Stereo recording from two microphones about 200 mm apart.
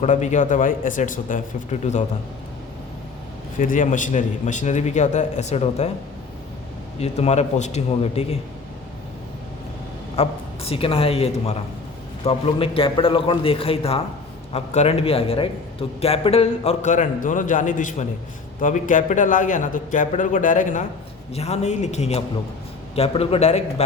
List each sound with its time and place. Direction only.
0.0 s a man's voice: 35° left (ahead or behind)
3.6 s a man's voice: 40° left (ahead or behind)
7.0 s a man's voice: 35° left (ahead or behind)
10.2 s a man's voice: 30° left (ahead or behind)